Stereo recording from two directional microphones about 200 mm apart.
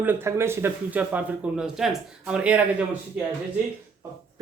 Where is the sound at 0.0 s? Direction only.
10° right (ahead or behind).